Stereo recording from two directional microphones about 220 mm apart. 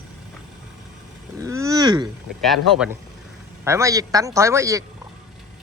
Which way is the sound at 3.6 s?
15° right (ahead or behind).